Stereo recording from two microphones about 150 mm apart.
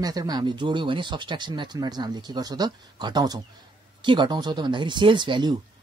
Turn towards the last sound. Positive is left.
turn(degrees=-30)  # may be behind; listen again after turning